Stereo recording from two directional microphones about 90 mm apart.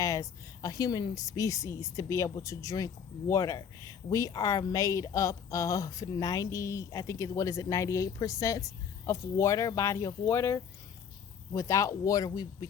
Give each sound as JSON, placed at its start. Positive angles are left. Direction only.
{"t": 0.0, "sound": "a woman's voice", "side_deg": 35}